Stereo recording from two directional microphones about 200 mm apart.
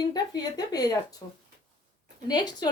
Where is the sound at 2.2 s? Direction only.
20° left (ahead or behind).